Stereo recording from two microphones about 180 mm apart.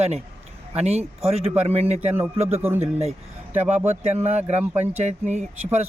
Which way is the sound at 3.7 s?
40° right (ahead or behind).